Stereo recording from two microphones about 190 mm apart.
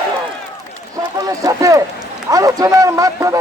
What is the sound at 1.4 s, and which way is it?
A man's voice, 20° right (ahead or behind).